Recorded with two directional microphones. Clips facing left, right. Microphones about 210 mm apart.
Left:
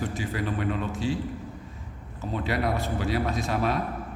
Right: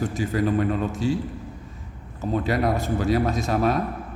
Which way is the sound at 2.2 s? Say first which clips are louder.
Right 5 dB; 45° right (ahead or behind).